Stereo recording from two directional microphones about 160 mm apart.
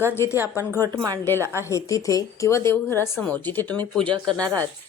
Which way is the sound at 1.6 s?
20° left (ahead or behind).